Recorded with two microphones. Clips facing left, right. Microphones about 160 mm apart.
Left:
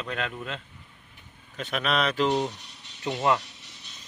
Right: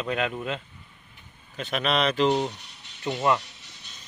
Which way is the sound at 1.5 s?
Centre (ahead or behind).